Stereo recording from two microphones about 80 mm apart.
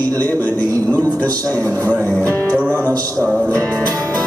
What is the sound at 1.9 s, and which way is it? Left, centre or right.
Speech, left.